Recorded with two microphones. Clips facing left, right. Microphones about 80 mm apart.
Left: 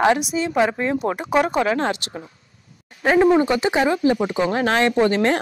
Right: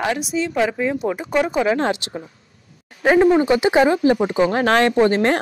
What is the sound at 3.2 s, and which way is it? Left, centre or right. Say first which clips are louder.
Speech: right 1 dB; centre.